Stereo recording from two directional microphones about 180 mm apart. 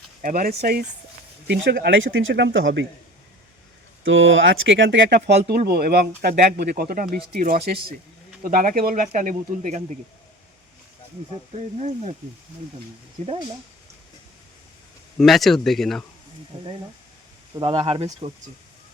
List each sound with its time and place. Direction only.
0.2 s speech: 50° right (ahead or behind)
1.5 s speech: 70° right (ahead or behind); by 2.8 s 90° right
4.0 s speech: 90° right
5.5 s speech: 60° right (ahead or behind)
11.5 s speech: 40° right (ahead or behind)
13.2 s speech: 40° right (ahead or behind)
15.2 s speech: centre (ahead or behind)
17.6 s speech: 30° right (ahead or behind)